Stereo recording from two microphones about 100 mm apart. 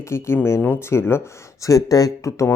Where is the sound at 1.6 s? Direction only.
35° left (ahead or behind).